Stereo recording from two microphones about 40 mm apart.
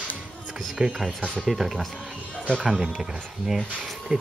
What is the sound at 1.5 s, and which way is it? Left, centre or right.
Speech, centre.